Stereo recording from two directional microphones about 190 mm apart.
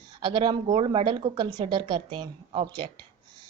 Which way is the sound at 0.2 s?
25° right (ahead or behind).